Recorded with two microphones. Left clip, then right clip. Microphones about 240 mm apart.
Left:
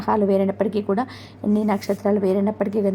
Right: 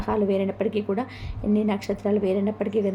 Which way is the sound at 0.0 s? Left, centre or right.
Left.